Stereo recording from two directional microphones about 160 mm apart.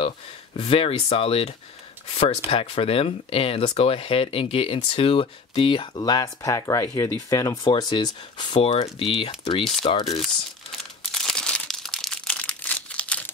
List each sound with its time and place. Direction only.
0.6 s speech: 35° left (ahead or behind)
11.1 s crumpling: 5° left (ahead or behind)